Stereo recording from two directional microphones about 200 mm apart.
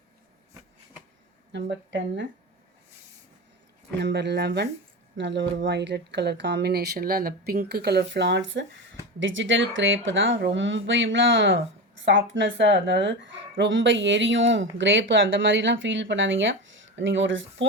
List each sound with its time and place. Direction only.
1.5 s speech: 60° right (ahead or behind)
3.9 s speech: 60° right (ahead or behind)